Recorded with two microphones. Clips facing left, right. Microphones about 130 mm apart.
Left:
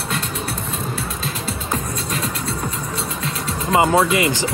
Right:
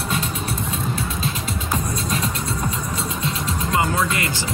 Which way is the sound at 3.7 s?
25° left (ahead or behind).